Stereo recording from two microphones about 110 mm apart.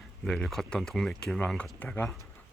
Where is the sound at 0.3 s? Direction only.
5° left (ahead or behind).